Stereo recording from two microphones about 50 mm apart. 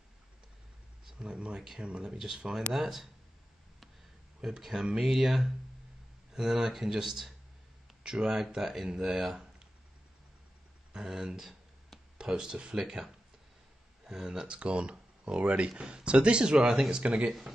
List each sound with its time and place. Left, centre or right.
1.3 s speech: centre
4.4 s speech: centre
10.9 s speech: centre
16.5 s speech: centre
17.0 s speech: right